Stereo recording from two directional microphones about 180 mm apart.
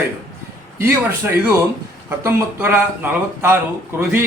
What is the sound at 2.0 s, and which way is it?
A man's voice, 15° right (ahead or behind).